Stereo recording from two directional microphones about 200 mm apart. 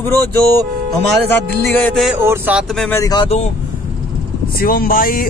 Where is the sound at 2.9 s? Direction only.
15° left (ahead or behind).